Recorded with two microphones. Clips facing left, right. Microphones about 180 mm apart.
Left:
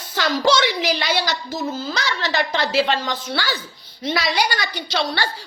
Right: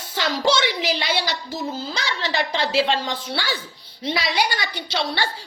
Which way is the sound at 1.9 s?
25° right (ahead or behind).